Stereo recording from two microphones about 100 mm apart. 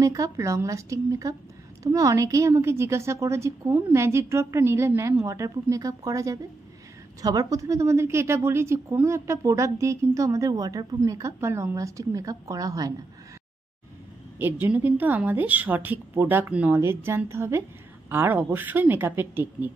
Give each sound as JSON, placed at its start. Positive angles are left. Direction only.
{"t": 0.0, "sound": "a woman's voice", "side_deg": -35}
{"t": 14.4, "sound": "a woman's voice", "side_deg": -20}